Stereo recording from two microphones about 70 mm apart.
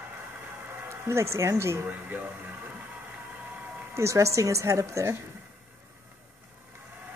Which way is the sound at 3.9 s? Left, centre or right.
Right.